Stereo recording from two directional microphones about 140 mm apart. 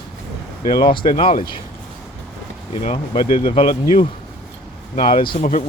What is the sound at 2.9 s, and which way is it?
Speech, 40° left (ahead or behind).